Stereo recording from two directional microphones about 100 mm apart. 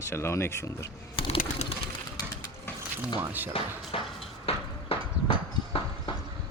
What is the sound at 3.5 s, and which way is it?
Speech, 70° left (ahead or behind).